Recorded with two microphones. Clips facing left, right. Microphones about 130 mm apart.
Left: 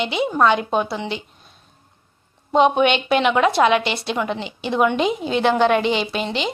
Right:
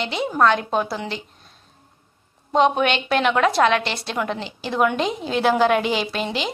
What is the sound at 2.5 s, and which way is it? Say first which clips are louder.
A woman's voice: left 2 dB; centre (ahead or behind).